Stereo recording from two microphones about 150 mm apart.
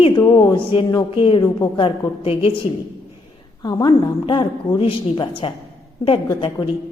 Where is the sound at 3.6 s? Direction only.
30° left (ahead or behind).